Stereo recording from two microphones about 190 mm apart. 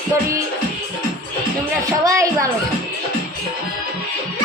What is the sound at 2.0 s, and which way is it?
Speech, 15° right (ahead or behind).